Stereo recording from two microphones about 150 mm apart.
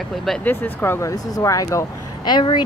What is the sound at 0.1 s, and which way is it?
Speech, centre (ahead or behind).